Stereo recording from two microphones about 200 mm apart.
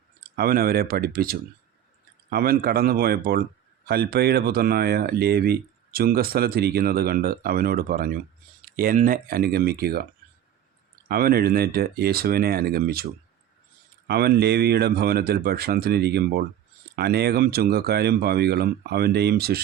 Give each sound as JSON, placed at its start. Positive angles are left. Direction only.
{"t": 0.2, "sound": "speech", "side_deg": -50}
{"t": 11.1, "sound": "speech", "side_deg": -50}
{"t": 14.1, "sound": "speech", "side_deg": -50}